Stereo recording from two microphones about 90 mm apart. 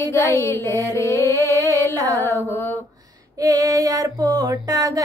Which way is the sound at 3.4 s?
40° right (ahead or behind).